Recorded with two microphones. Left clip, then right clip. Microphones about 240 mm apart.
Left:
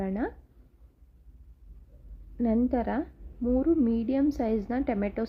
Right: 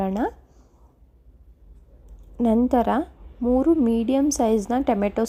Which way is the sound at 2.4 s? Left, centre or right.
Right.